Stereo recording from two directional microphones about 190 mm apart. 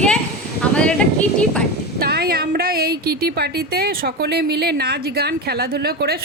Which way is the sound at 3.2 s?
55° right (ahead or behind).